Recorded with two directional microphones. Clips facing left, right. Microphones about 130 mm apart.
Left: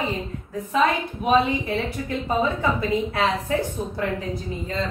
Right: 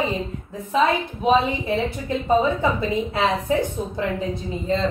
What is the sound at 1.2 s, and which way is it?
A woman's voice, 25° right (ahead or behind).